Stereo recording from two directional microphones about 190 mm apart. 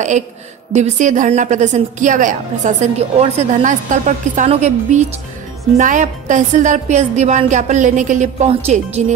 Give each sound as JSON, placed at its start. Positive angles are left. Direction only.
{"t": 0.7, "sound": "a woman's voice", "side_deg": -40}